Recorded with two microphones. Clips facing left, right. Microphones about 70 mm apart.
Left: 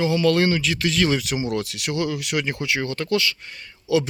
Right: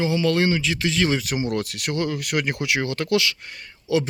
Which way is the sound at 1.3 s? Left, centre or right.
Right.